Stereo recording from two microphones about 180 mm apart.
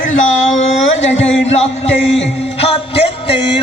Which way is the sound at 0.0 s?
40° left (ahead or behind).